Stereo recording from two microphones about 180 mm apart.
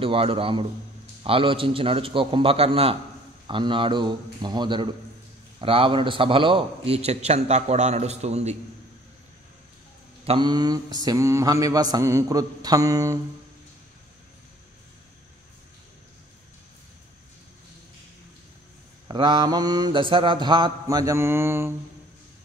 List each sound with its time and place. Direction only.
0.0 s a man's voice: 30° right (ahead or behind)
3.4 s mantra: 30° right (ahead or behind)
5.6 s a man's voice: 30° right (ahead or behind)
10.2 s mantra: 25° right (ahead or behind)
19.0 s mantra: 25° right (ahead or behind)